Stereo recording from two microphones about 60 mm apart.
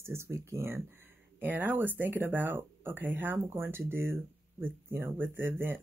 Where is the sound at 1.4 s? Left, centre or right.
Right.